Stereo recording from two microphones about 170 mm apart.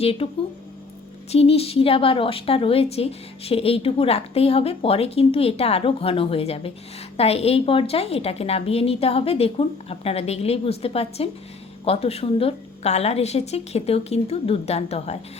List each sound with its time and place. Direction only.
0.0 s a woman's voice: 35° left (ahead or behind)
1.3 s a woman's voice: 35° left (ahead or behind)